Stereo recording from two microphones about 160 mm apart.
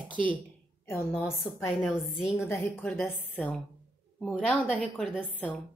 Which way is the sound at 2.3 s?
15° left (ahead or behind).